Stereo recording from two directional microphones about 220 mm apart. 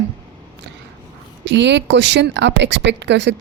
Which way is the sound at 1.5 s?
55° right (ahead or behind).